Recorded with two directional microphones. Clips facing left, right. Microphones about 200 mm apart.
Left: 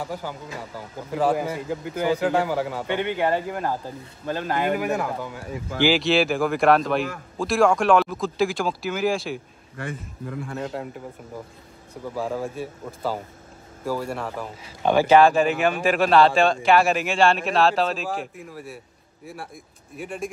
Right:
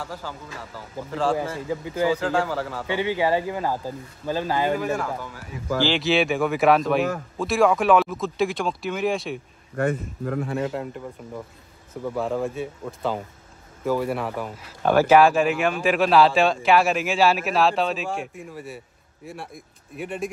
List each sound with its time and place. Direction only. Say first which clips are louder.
0.0 s speech: left 3 dB; 15° left (ahead or behind)
1.7 s a man's voice: right 2 dB; centre (ahead or behind)
2.1 s speech: left 2 dB; 15° left (ahead or behind)
2.9 s speech: right 2 dB; 5° right (ahead or behind)
4.6 s speech: even; 15° left (ahead or behind)
5.9 s a man's voice: left 1 dB; centre (ahead or behind)
9.8 s speech: right 9 dB; 50° right (ahead or behind)
10.6 s a man's voice: right 3 dB; centre (ahead or behind)